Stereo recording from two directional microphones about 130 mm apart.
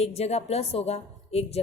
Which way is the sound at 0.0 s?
55° left (ahead or behind).